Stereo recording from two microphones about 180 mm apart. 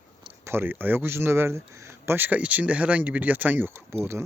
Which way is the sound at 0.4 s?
10° right (ahead or behind).